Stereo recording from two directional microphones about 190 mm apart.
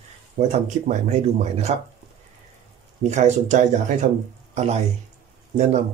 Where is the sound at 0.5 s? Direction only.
35° right (ahead or behind).